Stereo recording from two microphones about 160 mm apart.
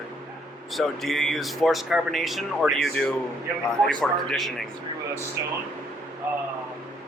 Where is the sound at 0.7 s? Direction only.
Centre (ahead or behind).